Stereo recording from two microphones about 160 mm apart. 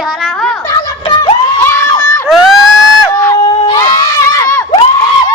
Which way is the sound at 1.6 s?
15° left (ahead or behind).